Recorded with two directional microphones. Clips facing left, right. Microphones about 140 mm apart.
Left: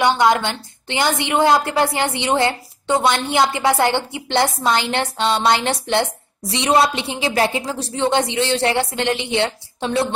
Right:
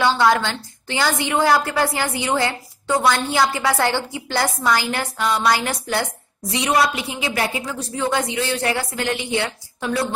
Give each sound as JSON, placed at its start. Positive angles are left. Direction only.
{"t": 0.0, "sound": "a woman's voice", "side_deg": 20}